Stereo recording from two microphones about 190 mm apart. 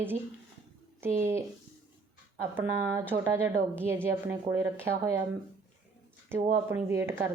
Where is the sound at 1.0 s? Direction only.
15° right (ahead or behind).